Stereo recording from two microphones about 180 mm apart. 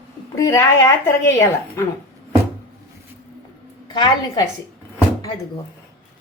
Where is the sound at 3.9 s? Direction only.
25° left (ahead or behind).